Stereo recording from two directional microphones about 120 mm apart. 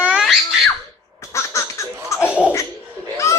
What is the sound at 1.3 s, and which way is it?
Laughter, 25° left (ahead or behind).